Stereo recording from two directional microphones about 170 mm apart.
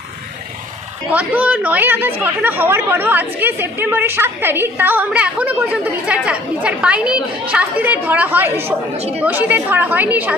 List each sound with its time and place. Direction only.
1.1 s speech: 10° right (ahead or behind)
8.6 s a woman's voice: 40° right (ahead or behind)
9.2 s speech: 10° right (ahead or behind)